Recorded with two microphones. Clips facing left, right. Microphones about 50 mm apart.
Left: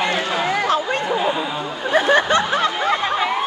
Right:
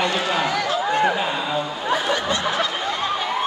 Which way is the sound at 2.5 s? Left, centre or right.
Left.